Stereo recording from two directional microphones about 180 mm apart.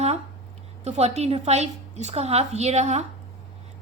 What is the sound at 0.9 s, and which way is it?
A woman's voice, 35° right (ahead or behind).